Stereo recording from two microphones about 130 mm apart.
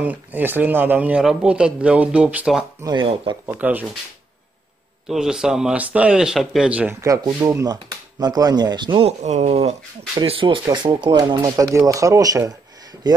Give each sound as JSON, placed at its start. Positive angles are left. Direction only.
{"t": 0.0, "sound": "a man's voice", "side_deg": -15}
{"t": 2.8, "sound": "speech", "side_deg": -35}
{"t": 3.4, "sound": "a man's voice", "side_deg": -15}
{"t": 5.0, "sound": "speech", "side_deg": -5}
{"t": 7.0, "sound": "speech", "side_deg": -25}
{"t": 9.2, "sound": "speech", "side_deg": -60}
{"t": 10.1, "sound": "speech", "side_deg": -40}